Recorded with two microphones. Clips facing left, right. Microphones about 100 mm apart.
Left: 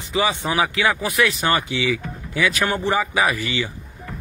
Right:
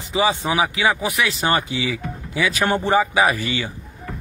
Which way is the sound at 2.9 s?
20° right (ahead or behind).